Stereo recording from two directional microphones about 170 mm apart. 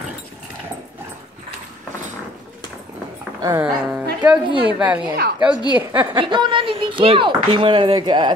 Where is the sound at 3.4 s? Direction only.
20° right (ahead or behind).